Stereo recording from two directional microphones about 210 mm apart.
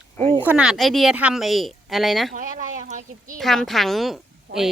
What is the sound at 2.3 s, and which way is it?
Speech, 40° right (ahead or behind).